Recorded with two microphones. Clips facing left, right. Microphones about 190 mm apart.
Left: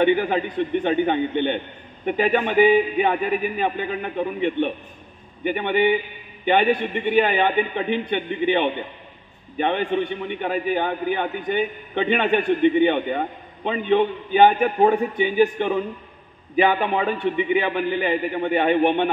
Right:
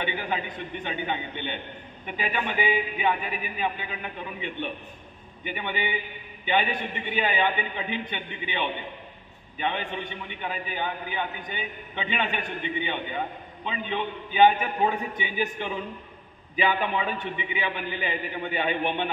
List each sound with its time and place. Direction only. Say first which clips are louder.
0.0 s a man's voice: left 11 dB; 50° left (ahead or behind)